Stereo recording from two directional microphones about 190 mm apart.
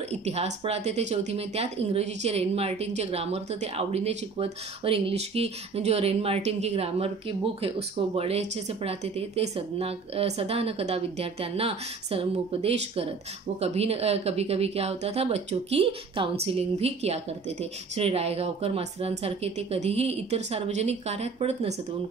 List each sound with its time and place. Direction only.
0.1 s speech: 35° right (ahead or behind)